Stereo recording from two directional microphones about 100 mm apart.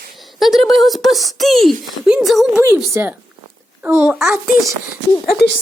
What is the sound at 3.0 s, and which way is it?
Speech, 20° right (ahead or behind).